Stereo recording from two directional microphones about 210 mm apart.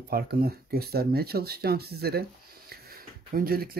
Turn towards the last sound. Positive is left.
turn(degrees=-45)  # may be behind; listen again after turning